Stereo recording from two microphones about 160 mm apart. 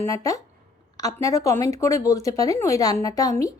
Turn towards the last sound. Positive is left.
turn(degrees=20)  # may be behind; listen again after turning